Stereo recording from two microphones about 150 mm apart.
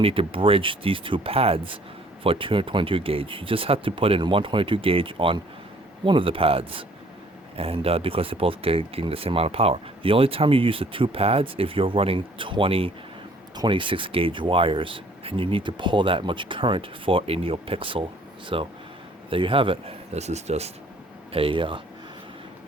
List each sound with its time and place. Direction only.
0.0 s speech: 35° right (ahead or behind)
21.3 s speech: 35° right (ahead or behind)